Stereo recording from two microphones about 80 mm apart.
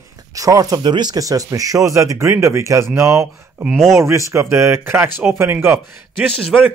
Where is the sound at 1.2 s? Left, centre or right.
Right.